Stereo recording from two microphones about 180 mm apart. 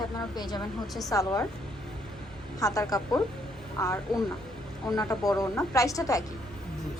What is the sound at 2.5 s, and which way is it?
A woman's voice, 20° left (ahead or behind).